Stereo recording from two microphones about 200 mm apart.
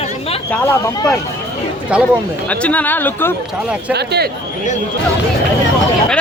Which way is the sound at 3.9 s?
55° right (ahead or behind).